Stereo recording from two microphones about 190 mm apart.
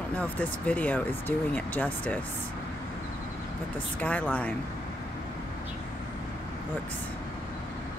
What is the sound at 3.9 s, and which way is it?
Speech, 5° left (ahead or behind).